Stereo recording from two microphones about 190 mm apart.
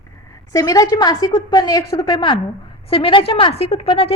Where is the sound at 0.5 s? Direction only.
20° left (ahead or behind).